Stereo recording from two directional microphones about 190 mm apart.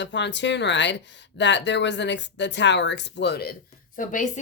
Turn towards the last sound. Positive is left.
turn(degrees=40)  # may be behind; listen again after turning